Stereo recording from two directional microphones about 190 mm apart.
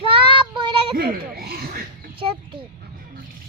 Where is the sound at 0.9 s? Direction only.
55° right (ahead or behind).